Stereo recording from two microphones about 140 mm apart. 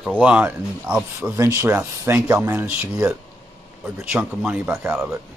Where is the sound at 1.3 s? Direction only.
20° right (ahead or behind).